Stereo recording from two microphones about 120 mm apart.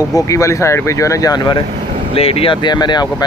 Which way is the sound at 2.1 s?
55° left (ahead or behind).